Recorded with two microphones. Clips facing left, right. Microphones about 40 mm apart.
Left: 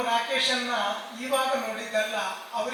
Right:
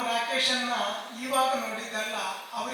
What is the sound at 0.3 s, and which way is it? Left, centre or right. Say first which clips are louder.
A man's voice: left 1 dB; left.